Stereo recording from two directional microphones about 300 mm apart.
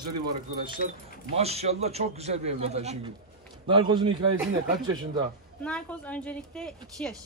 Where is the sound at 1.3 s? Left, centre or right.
Right.